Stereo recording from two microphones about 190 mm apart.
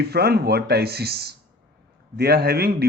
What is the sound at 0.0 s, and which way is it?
Speech, 55° right (ahead or behind).